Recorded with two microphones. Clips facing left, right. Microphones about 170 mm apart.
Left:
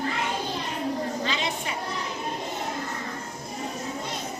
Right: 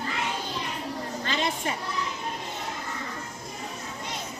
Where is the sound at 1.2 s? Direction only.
50° right (ahead or behind).